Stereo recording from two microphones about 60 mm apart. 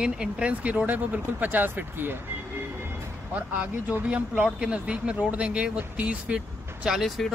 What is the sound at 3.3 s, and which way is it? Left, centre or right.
Speech, right.